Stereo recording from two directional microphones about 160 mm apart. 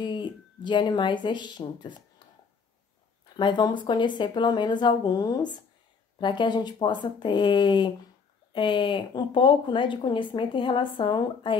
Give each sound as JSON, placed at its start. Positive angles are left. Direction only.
{"t": 0.0, "sound": "speech", "side_deg": 30}
{"t": 3.3, "sound": "speech", "side_deg": 30}